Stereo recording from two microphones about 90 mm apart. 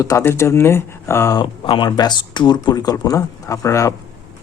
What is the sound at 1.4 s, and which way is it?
Speech, 60° left (ahead or behind).